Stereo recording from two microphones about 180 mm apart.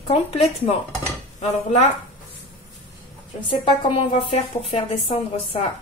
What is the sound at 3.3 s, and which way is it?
A woman's voice, 30° left (ahead or behind).